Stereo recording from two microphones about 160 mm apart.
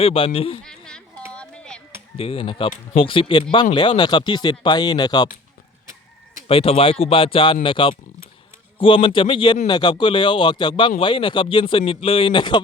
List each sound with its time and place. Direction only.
0.0 s speech: 35° left (ahead or behind)
0.6 s a sound: 5° left (ahead or behind)
2.1 s speech: 35° left (ahead or behind)
6.5 s speech: 35° left (ahead or behind)